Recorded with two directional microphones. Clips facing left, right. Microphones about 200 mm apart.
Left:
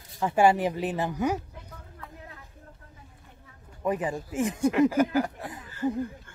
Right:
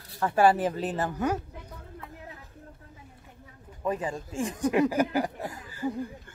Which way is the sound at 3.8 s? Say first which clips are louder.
Left 2 dB; 20° left (ahead or behind).